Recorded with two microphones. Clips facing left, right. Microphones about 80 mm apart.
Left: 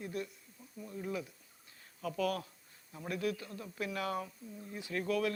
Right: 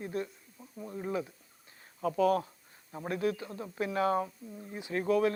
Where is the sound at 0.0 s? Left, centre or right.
Right.